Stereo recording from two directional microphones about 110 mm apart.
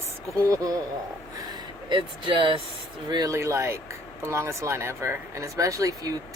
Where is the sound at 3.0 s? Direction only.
35° right (ahead or behind).